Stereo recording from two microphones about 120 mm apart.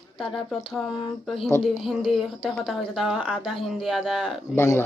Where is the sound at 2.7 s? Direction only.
5° right (ahead or behind).